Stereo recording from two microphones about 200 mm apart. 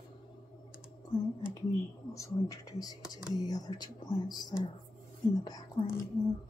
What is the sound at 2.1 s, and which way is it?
Speech, 15° left (ahead or behind).